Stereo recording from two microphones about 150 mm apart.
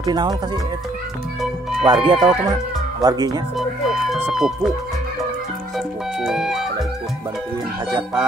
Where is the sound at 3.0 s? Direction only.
25° right (ahead or behind).